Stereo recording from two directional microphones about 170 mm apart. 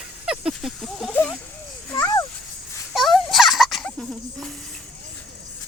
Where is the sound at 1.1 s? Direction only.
10° left (ahead or behind).